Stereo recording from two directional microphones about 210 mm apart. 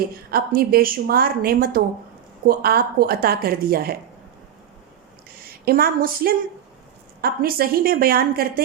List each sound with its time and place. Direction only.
0.3 s speech: 45° right (ahead or behind)
5.3 s a woman's voice: 45° right (ahead or behind)